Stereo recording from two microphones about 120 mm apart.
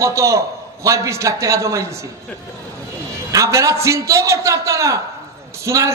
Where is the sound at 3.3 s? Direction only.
25° right (ahead or behind).